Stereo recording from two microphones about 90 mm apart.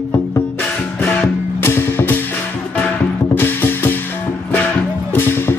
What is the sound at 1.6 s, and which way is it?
Music, 25° left (ahead or behind).